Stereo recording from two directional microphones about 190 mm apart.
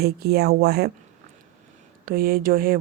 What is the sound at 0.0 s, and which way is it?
Speech, 55° right (ahead or behind).